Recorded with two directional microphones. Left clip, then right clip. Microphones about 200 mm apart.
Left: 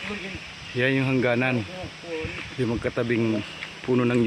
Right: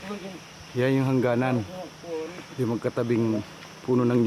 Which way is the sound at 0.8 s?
5° right (ahead or behind).